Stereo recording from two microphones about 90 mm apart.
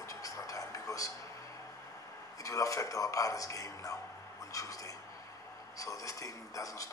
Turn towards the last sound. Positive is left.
turn(degrees=40)  # may be behind; listen again after turning